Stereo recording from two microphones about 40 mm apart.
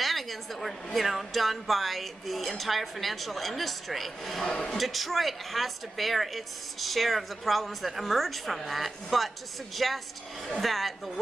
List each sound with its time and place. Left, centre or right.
0.0 s a woman's voice: centre
4.4 s a man's voice: centre
4.7 s a woman's voice: centre